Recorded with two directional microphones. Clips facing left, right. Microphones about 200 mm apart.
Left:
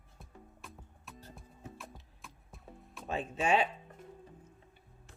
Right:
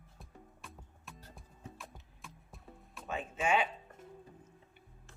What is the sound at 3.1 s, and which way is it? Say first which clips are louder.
Speech: left 2 dB; 35° left (ahead or behind).